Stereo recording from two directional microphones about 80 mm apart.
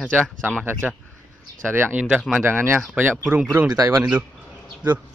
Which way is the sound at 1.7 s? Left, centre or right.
Right.